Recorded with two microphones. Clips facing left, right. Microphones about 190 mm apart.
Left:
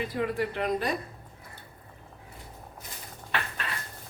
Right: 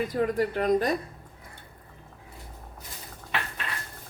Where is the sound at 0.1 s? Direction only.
45° right (ahead or behind).